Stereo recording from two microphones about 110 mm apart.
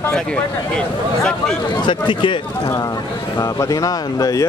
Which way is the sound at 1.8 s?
50° left (ahead or behind).